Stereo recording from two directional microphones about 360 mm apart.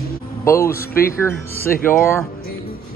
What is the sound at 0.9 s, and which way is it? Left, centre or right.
Speech, left.